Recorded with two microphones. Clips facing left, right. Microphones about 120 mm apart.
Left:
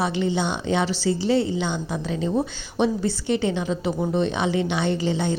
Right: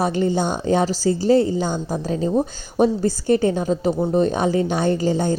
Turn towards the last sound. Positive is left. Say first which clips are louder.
# right 4 dB
turn(degrees=-45)  # may be behind; listen again after turning